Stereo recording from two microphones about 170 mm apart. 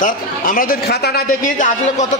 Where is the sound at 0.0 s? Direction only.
55° left (ahead or behind).